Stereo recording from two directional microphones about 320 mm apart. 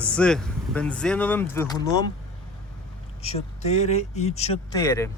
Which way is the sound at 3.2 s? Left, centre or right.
Centre.